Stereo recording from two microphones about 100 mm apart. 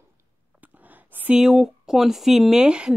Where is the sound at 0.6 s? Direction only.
15° right (ahead or behind).